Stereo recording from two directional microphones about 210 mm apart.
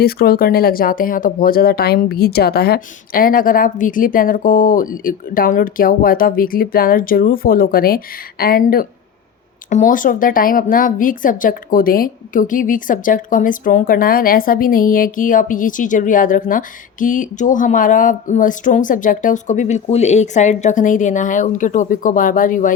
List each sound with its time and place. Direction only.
0.0 s speech: 45° left (ahead or behind)